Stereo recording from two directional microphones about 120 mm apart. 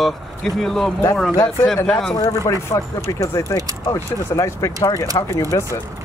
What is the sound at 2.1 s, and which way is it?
Speech, 30° left (ahead or behind).